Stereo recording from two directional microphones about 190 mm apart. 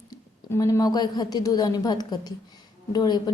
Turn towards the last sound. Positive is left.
turn(degrees=20)  # may be behind; listen again after turning